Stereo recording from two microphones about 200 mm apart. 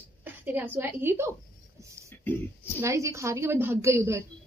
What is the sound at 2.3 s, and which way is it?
Speech, 10° left (ahead or behind).